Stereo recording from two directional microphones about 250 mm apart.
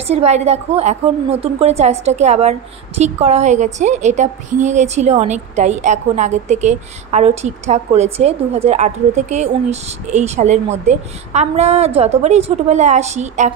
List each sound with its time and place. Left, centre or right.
0.0 s a woman's voice: right